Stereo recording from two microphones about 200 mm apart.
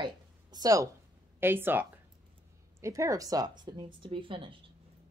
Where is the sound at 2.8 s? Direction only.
15° right (ahead or behind).